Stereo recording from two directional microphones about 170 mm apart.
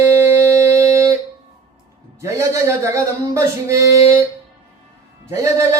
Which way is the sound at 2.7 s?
15° right (ahead or behind).